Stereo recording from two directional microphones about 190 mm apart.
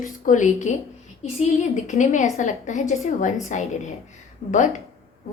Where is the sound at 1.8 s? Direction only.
40° left (ahead or behind).